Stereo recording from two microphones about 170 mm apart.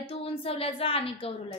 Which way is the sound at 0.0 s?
35° left (ahead or behind).